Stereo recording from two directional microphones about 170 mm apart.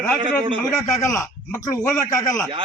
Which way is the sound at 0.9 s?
20° left (ahead or behind).